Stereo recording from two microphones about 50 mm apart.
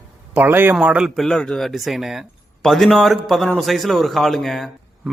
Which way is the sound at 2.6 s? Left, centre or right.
Centre.